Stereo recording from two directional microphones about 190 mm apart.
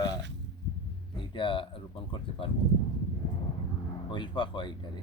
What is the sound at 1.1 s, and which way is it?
Speech, 25° left (ahead or behind).